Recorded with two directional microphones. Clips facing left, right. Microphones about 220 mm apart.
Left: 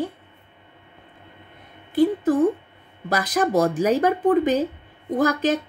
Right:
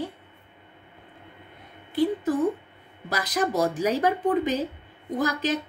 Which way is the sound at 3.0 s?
50° left (ahead or behind).